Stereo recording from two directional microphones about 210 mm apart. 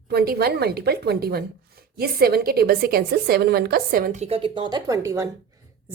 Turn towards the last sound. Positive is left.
turn(degrees=-15)  # may be behind; listen again after turning